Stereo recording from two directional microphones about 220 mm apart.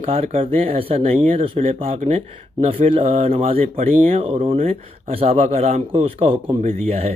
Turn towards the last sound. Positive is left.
turn(degrees=-30)  # may be behind; listen again after turning